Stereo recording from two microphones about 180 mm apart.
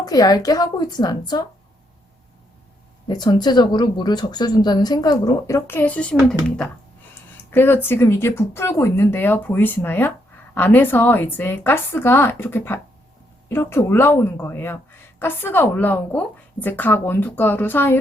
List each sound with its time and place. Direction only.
0.0 s a woman's voice: 20° left (ahead or behind)
3.1 s a woman's voice: 25° left (ahead or behind); by 6.1 s 5° left (ahead or behind)
7.5 s a woman's voice: 10° left (ahead or behind)